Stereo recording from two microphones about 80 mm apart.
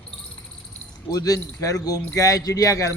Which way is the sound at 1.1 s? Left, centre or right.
Left.